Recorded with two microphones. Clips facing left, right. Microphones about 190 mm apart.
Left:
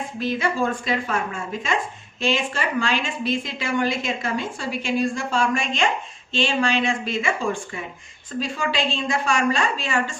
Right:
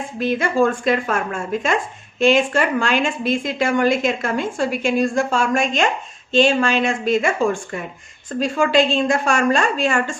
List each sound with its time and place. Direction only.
0.2 s a woman's voice: 50° right (ahead or behind)